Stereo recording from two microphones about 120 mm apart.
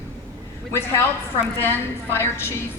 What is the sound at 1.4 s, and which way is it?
Speech, 20° left (ahead or behind).